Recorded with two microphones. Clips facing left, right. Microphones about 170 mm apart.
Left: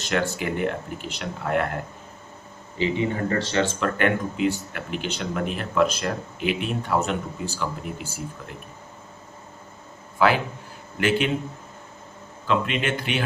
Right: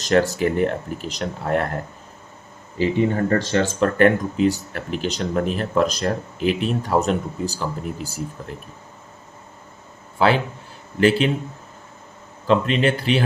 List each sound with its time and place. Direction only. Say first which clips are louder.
0.0 s speech: right 7 dB; 35° right (ahead or behind)
10.2 s a man's voice: right 2 dB; 30° right (ahead or behind)
12.5 s speech: right 6 dB; 35° right (ahead or behind)